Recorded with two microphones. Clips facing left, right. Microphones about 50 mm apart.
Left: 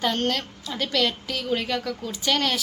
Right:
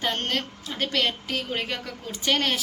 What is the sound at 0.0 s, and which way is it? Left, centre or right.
A woman's voice, right.